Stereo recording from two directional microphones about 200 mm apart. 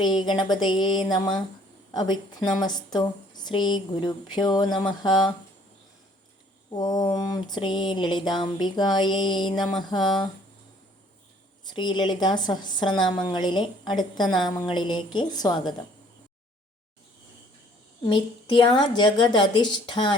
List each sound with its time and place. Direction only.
0.0 s a woman's voice: 20° left (ahead or behind)
6.7 s a woman's voice: 20° left (ahead or behind)
11.6 s a woman's voice: 20° left (ahead or behind)
18.0 s a woman's voice: 25° left (ahead or behind)